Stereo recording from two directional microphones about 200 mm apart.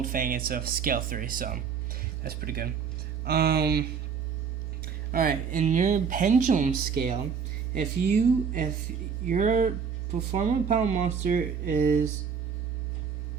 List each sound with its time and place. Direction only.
0.0 s speech: 45° right (ahead or behind)
5.1 s speech: 45° right (ahead or behind)